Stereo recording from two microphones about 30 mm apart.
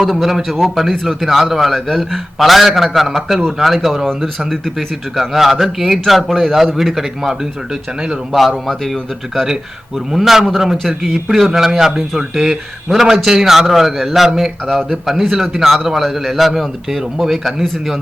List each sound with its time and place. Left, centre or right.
0.0 s a man's voice: centre
5.4 s a man's voice: centre
7.7 s speech: right
8.3 s a man's voice: centre
10.1 s a man's voice: centre